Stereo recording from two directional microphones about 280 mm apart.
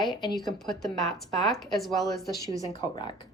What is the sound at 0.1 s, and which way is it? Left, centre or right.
Speech, centre.